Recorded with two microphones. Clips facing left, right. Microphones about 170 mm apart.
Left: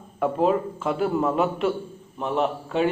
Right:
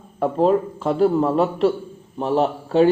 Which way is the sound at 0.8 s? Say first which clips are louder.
Right 6 dB; 35° right (ahead or behind).